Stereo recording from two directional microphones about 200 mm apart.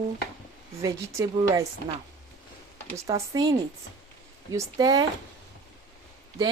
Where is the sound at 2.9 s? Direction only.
15° right (ahead or behind).